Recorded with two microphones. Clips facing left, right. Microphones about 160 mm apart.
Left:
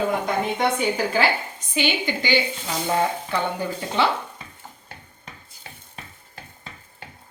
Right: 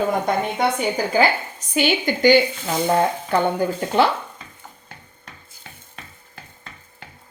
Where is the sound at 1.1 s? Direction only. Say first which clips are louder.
Right 3 dB; 45° right (ahead or behind).